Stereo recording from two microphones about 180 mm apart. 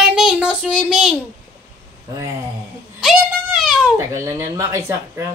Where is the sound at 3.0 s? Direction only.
Centre (ahead or behind).